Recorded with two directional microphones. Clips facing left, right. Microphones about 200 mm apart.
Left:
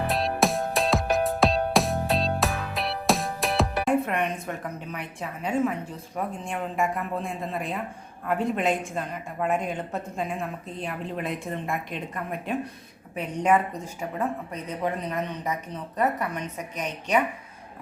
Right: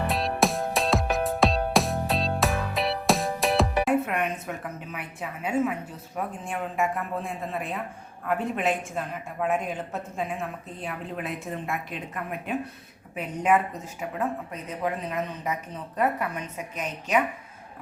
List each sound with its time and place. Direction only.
0.1 s music: centre (ahead or behind)
6.1 s a woman's voice: 5° right (ahead or behind)